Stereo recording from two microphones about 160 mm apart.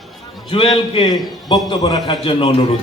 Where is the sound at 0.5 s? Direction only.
35° left (ahead or behind).